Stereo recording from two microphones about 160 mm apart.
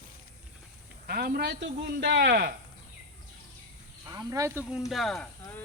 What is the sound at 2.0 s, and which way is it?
Speech, 90° right.